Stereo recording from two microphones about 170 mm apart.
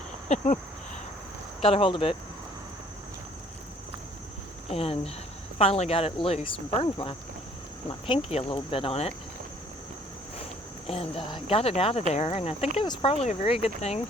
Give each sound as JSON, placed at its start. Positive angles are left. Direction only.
{"t": 0.3, "sound": "speech", "side_deg": 45}
{"t": 1.6, "sound": "speech", "side_deg": 30}
{"t": 4.7, "sound": "speech", "side_deg": 35}
{"t": 10.8, "sound": "speech", "side_deg": 35}